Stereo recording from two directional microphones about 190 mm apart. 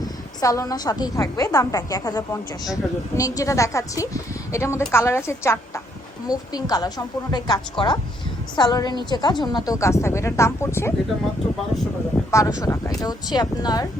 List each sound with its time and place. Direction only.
0.0 s a woman's voice: 20° left (ahead or behind)
12.3 s a woman's voice: 15° left (ahead or behind)